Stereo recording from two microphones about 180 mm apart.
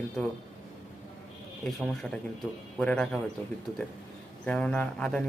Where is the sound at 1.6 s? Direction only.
Centre (ahead or behind).